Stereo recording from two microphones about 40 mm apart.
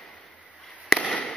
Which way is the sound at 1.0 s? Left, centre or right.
Left.